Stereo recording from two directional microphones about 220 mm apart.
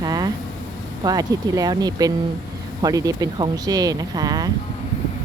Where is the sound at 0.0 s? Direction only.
15° right (ahead or behind).